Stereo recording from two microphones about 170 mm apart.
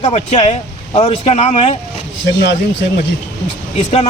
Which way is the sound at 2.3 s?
75° left (ahead or behind).